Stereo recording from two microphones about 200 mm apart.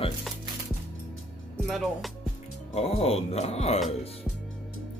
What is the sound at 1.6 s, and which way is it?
Speech, centre (ahead or behind).